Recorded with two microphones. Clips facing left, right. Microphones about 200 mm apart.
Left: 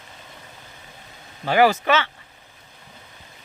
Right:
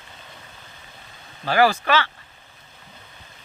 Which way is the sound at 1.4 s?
20° left (ahead or behind).